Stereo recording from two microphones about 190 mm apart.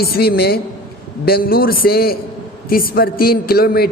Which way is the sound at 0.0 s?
55° left (ahead or behind).